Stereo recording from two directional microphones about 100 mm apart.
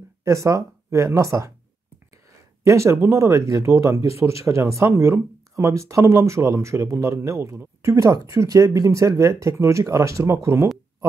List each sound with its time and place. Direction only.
0.2 s speech: 30° right (ahead or behind)
2.6 s speech: 30° right (ahead or behind)